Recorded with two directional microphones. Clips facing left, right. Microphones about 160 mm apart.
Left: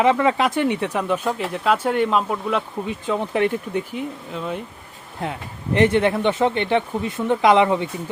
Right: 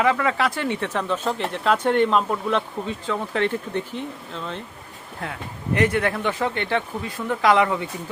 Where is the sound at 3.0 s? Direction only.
20° left (ahead or behind).